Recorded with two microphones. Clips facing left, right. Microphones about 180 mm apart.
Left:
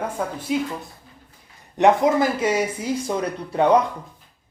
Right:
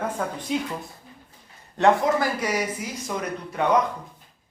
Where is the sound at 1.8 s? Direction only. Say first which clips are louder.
Left 3 dB; 20° left (ahead or behind).